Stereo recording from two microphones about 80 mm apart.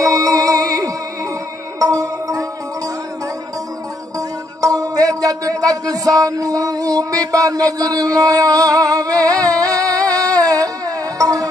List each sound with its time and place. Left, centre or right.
0.0 s music: right
4.6 s music: right